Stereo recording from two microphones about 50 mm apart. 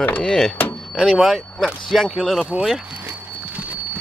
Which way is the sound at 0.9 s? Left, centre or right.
Centre.